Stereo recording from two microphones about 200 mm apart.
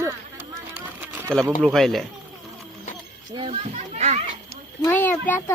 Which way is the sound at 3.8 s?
35° right (ahead or behind).